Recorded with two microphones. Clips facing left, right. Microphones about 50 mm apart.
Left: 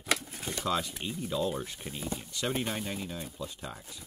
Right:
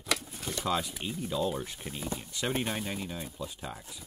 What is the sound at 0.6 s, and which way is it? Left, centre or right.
Speech, centre.